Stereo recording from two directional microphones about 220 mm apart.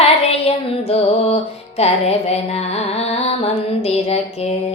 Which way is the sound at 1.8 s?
30° left (ahead or behind).